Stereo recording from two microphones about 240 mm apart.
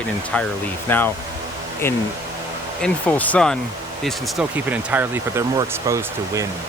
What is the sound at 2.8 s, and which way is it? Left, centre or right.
Speech, centre.